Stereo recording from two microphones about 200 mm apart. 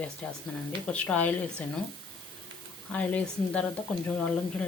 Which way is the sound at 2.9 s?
5° left (ahead or behind).